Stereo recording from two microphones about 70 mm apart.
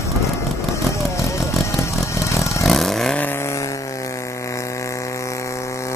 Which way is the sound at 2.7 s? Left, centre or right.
Centre.